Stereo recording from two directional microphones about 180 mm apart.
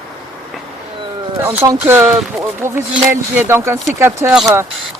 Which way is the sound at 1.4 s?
15° right (ahead or behind).